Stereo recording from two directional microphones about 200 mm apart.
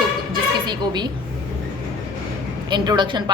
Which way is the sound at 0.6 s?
20° right (ahead or behind).